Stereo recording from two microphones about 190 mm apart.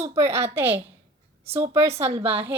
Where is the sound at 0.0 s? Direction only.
15° right (ahead or behind).